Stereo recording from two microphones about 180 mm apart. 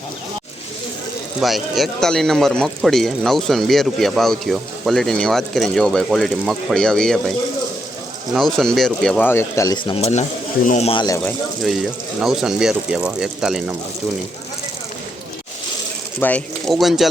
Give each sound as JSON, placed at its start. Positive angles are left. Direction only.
{"t": 1.4, "sound": "speech", "side_deg": 0}
{"t": 8.4, "sound": "speech", "side_deg": 0}
{"t": 11.3, "sound": "speech", "side_deg": 0}
{"t": 16.2, "sound": "speech", "side_deg": 5}